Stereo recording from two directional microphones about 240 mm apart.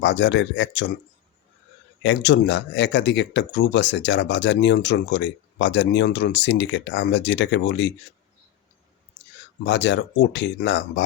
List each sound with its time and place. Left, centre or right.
0.0 s speech: left
2.0 s speech: left
9.6 s speech: left